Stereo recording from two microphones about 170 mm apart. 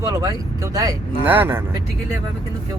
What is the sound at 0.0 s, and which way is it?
Speech, 20° right (ahead or behind).